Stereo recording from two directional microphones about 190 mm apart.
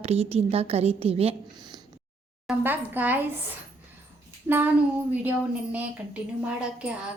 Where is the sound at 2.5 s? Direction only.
10° right (ahead or behind).